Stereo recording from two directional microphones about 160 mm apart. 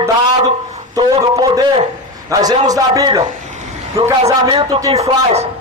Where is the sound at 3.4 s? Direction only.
50° right (ahead or behind).